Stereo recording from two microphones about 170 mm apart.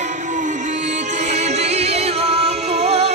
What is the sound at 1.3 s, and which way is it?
Music, 40° right (ahead or behind).